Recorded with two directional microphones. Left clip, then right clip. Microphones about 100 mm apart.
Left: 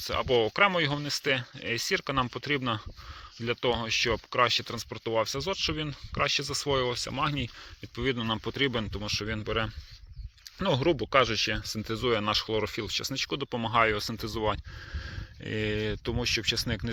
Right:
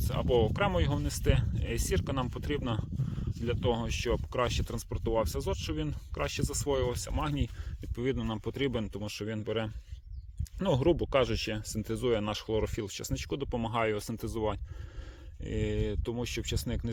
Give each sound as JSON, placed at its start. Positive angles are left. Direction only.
{"t": 0.0, "sound": "speech", "side_deg": -60}
{"t": 1.0, "sound": "speech", "side_deg": -80}
{"t": 8.0, "sound": "speech", "side_deg": -30}
{"t": 8.3, "sound": "speech", "side_deg": -20}
{"t": 8.9, "sound": "speech", "side_deg": -35}
{"t": 10.6, "sound": "speech", "side_deg": -50}
{"t": 13.3, "sound": "speech", "side_deg": -30}
{"t": 15.4, "sound": "speech", "side_deg": -10}